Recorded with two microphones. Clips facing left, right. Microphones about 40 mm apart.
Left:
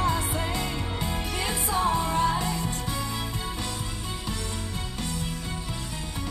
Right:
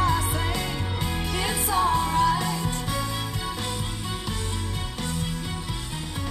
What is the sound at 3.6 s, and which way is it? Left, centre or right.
Music, right.